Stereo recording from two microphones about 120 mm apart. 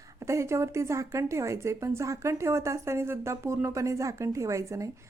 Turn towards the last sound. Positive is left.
turn(degrees=-25)  # may be behind; listen again after turning